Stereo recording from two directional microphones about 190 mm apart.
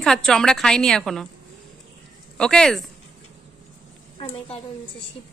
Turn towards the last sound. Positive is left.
turn(degrees=30)  # may be behind; listen again after turning